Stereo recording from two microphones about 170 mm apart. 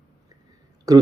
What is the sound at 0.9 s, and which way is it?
Speech, 20° right (ahead or behind).